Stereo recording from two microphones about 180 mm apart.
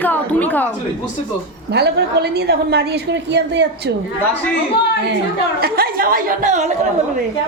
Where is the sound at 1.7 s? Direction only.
65° right (ahead or behind).